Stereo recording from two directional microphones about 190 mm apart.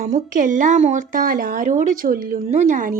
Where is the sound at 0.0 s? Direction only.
40° right (ahead or behind).